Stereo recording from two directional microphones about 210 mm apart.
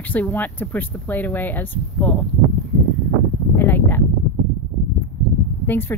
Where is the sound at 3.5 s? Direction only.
10° left (ahead or behind).